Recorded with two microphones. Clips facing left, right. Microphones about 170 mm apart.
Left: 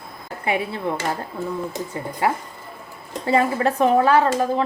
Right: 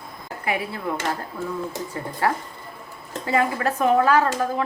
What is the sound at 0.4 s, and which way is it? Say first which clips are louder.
Speech: left 3 dB; 25° left (ahead or behind).